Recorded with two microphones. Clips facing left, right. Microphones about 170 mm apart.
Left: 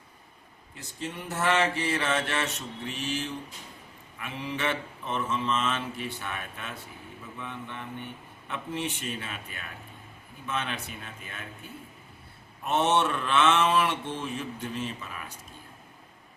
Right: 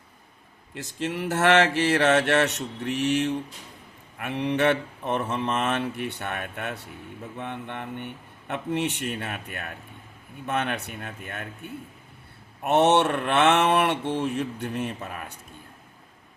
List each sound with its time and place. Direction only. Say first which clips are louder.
0.7 s speech: right 7 dB; 85° right; by 15.3 s 50° right (ahead or behind)